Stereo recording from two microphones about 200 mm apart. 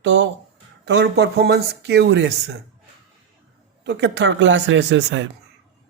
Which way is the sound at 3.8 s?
60° right (ahead or behind).